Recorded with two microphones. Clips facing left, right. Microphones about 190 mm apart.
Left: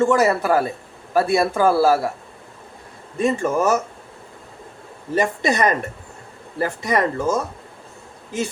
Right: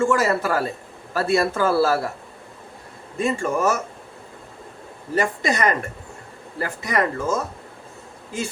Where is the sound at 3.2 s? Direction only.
20° left (ahead or behind).